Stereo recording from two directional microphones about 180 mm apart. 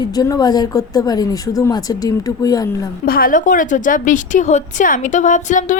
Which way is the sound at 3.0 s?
55° left (ahead or behind).